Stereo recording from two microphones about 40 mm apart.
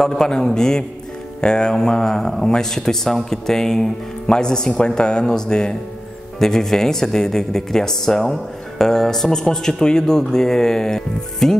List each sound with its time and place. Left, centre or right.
0.0 s speech: centre